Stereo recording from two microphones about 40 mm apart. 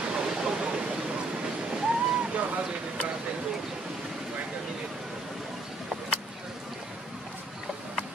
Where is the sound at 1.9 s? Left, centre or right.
Right.